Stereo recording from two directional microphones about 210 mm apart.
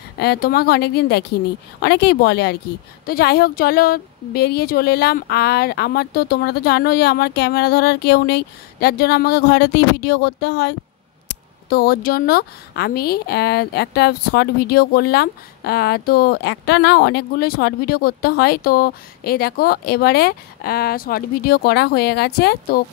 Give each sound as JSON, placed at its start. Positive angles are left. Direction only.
{"t": 0.2, "sound": "speech", "side_deg": 50}